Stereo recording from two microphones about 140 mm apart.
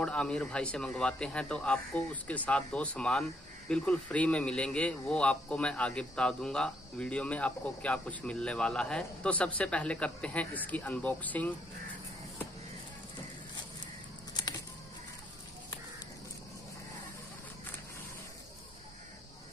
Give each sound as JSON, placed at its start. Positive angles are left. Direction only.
{"t": 0.0, "sound": "speech", "side_deg": 5}
{"t": 14.3, "sound": "music", "side_deg": 30}